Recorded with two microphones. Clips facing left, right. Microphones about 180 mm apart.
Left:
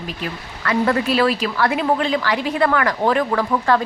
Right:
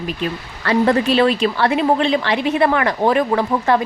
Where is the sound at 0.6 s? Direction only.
30° right (ahead or behind).